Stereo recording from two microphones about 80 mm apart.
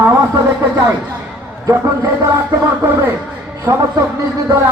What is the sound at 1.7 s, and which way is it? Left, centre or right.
Speech, right.